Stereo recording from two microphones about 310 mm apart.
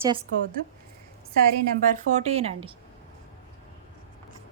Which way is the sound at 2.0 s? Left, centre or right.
Right.